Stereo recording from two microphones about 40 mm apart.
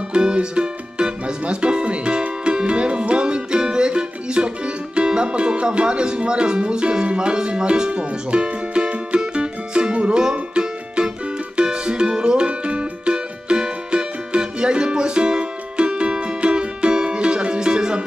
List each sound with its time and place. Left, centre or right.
0.1 s music: right
4.9 s speech: right
10.3 s music: right